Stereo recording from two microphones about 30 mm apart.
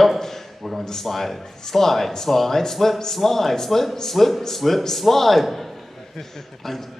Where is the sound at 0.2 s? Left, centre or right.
Centre.